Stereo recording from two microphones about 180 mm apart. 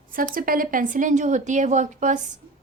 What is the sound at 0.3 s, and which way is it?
A woman's voice, 50° right (ahead or behind).